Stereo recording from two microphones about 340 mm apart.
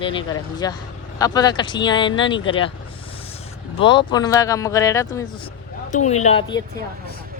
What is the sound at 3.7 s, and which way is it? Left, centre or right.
Speech, centre.